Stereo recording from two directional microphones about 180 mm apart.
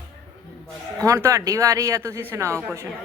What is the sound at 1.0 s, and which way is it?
A woman's voice, 15° right (ahead or behind).